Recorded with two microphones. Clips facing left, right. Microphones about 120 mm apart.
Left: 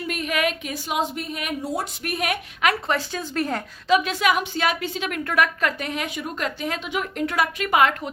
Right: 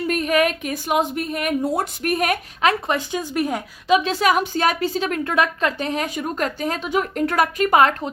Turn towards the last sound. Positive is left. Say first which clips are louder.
# right 4 dB
turn(degrees=-40)  # may be behind; listen again after turning